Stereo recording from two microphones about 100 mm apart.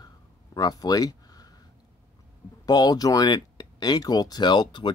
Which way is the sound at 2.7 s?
45° left (ahead or behind).